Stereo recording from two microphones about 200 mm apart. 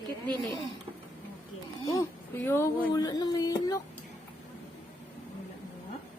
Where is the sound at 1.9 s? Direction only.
15° left (ahead or behind).